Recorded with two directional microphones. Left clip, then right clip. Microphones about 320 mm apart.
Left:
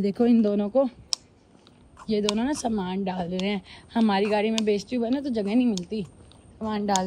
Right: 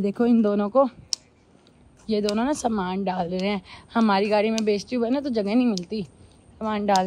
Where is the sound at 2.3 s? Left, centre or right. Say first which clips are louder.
Right 3 dB; centre.